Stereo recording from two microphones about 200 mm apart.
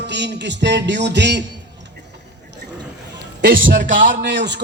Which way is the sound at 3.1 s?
50° right (ahead or behind).